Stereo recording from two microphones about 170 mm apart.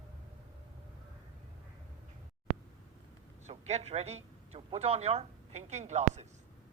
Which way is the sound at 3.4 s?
40° right (ahead or behind).